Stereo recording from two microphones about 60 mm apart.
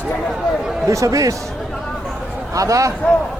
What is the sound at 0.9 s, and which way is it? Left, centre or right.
Speech, right.